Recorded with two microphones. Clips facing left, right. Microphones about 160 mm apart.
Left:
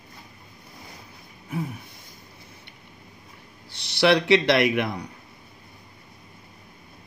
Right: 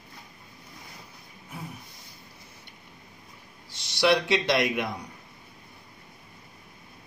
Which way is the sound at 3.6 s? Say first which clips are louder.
Left 3 dB; 65° left (ahead or behind).